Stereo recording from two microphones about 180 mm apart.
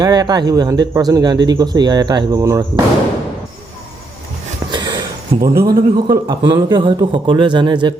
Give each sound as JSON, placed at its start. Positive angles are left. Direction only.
{"t": 0.0, "sound": "speech", "side_deg": -20}
{"t": 4.7, "sound": "a sound", "side_deg": -25}
{"t": 5.4, "sound": "speech", "side_deg": -20}